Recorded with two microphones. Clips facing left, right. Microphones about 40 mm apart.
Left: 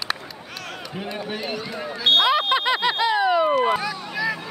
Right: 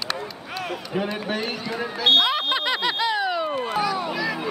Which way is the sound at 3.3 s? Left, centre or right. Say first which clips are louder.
Left 6 dB; left.